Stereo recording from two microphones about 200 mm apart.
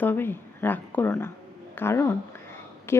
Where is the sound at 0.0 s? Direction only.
10° left (ahead or behind).